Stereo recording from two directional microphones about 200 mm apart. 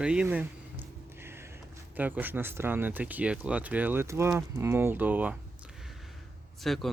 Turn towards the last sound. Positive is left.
turn(degrees=0)  # may be behind; listen again after turning